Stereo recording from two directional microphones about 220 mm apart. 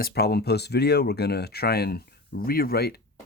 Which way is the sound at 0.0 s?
45° left (ahead or behind).